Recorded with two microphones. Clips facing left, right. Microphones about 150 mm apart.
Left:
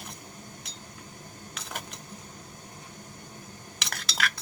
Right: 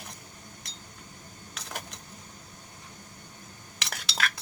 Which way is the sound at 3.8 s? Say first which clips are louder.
Even; centre (ahead or behind).